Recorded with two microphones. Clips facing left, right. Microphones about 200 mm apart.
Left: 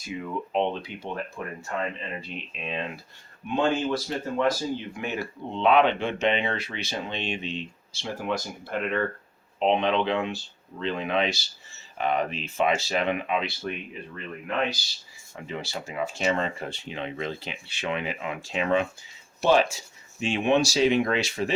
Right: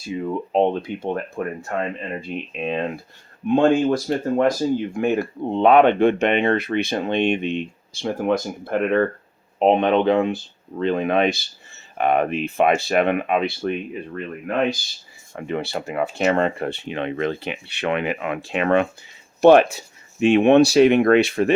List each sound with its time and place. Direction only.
0.3 s speech: 40° right (ahead or behind); by 21.5 s 60° right (ahead or behind)